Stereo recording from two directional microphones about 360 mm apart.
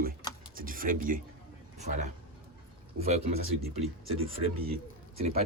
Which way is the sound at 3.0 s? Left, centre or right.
Right.